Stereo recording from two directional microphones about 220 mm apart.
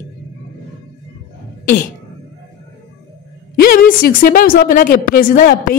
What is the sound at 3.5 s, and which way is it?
Speech, 40° left (ahead or behind).